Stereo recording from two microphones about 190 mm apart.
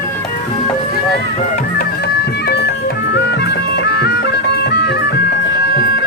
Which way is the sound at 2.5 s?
60° left (ahead or behind).